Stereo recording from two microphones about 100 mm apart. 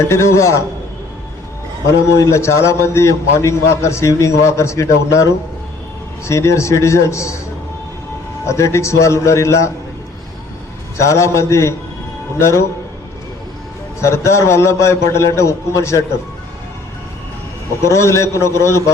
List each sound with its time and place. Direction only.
0.1 s a man's voice: 30° left (ahead or behind)
2.1 s a man's voice: 30° left (ahead or behind)
8.4 s a man's voice: 30° left (ahead or behind)
10.9 s a man's voice: 30° left (ahead or behind)
14.0 s a man's voice: 30° left (ahead or behind)
17.8 s a man's voice: 30° left (ahead or behind)